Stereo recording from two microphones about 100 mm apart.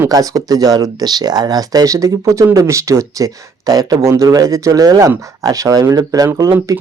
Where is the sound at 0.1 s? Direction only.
35° right (ahead or behind).